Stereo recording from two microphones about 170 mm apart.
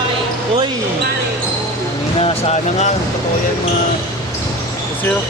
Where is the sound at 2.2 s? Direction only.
35° left (ahead or behind).